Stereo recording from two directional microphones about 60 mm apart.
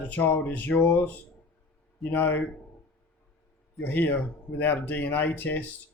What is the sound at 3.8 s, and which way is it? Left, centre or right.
Speech, left.